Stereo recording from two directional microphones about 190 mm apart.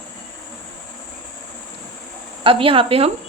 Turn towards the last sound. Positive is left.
turn(degrees=-30)  # may be behind; listen again after turning